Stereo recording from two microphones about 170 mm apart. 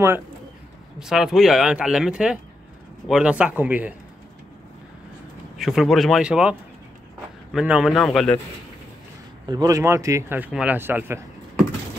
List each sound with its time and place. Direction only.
0.9 s speech: 5° right (ahead or behind)
5.6 s speech: centre (ahead or behind)
7.5 s speech: 5° right (ahead or behind)
9.5 s speech: 20° right (ahead or behind)